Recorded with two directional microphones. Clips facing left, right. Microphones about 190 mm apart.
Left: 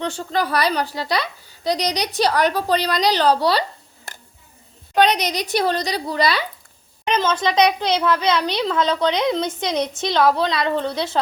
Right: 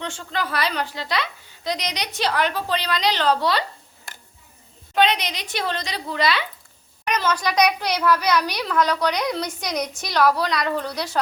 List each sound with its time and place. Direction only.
0.0 s a woman's voice: 40° left (ahead or behind)
4.9 s a woman's voice: 40° left (ahead or behind)
7.0 s a child's voice: 25° left (ahead or behind)